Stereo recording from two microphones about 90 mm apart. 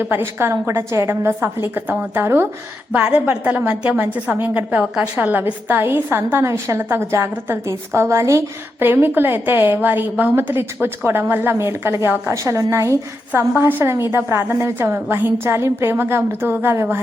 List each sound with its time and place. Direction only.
0.0 s a woman's voice: 25° right (ahead or behind)
2.9 s a woman's voice: 15° right (ahead or behind)